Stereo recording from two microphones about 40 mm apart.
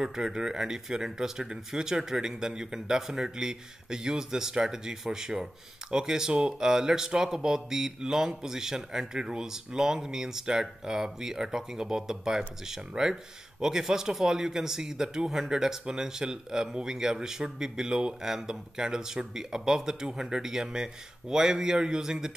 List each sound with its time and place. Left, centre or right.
0.0 s speech: centre